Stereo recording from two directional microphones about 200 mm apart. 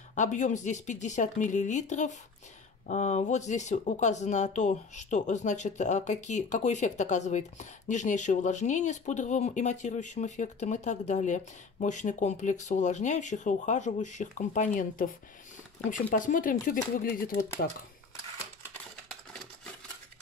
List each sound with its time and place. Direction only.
0.1 s speech: 40° left (ahead or behind)